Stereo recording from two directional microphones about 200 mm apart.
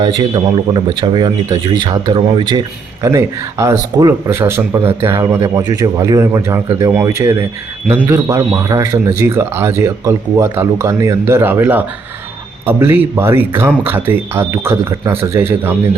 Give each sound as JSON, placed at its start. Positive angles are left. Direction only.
{"t": 0.0, "sound": "a man's voice", "side_deg": -20}